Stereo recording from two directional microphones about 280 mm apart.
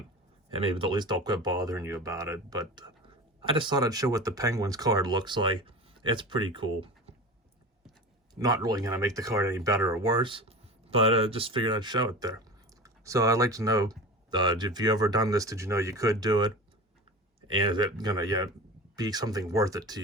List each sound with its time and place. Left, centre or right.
0.5 s speech: centre
8.4 s speech: centre
17.5 s speech: centre